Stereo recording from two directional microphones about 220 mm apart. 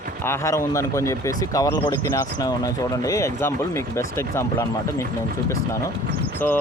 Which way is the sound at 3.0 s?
15° left (ahead or behind).